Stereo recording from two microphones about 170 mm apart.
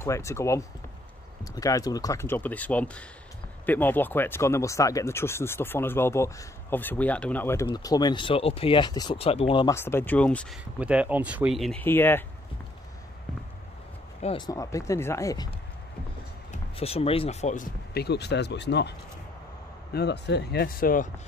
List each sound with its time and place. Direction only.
0.0 s speech: 15° left (ahead or behind); by 9.7 s 35° left (ahead or behind)
9.7 s speech: 15° left (ahead or behind)
10.8 s speech: 5° right (ahead or behind)
11.8 s speech: 10° left (ahead or behind)
14.2 s speech: 25° left (ahead or behind)
16.7 s speech: 35° left (ahead or behind)
17.9 s speech: 75° left (ahead or behind); by 21.1 s 55° left (ahead or behind)